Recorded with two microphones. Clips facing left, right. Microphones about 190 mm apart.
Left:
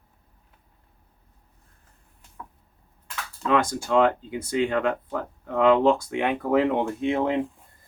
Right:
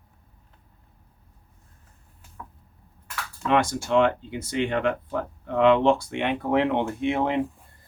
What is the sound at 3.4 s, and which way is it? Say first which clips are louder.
Speech: even; 40° left (ahead or behind).